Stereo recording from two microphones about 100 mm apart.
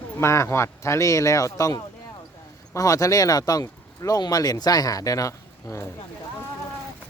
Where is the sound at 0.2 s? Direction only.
25° left (ahead or behind).